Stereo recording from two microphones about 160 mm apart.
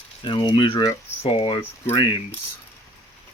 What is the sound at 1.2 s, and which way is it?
Speech, 35° left (ahead or behind).